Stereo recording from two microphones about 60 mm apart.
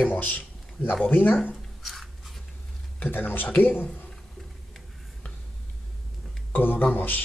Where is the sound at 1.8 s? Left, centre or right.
Centre.